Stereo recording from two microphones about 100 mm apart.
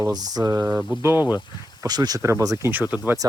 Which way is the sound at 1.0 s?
20° right (ahead or behind).